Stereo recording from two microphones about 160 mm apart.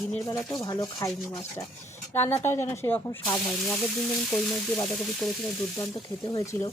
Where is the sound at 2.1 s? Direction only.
15° left (ahead or behind).